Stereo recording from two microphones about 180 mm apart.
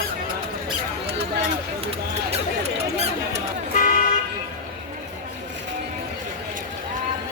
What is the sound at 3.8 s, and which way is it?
Vehicle, 45° left (ahead or behind).